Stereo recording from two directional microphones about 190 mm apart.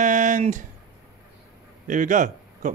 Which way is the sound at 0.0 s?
40° right (ahead or behind).